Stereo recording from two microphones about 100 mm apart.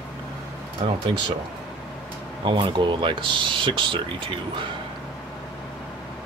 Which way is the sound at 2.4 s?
55° right (ahead or behind).